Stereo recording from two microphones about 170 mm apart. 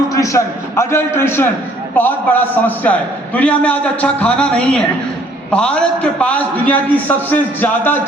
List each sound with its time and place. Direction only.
0.1 s a man's voice: 20° left (ahead or behind)